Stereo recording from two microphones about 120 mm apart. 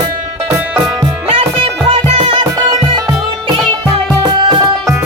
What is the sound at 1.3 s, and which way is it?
Music, 50° right (ahead or behind).